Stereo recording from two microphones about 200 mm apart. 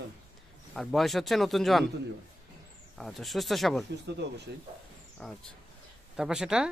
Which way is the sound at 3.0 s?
Centre (ahead or behind).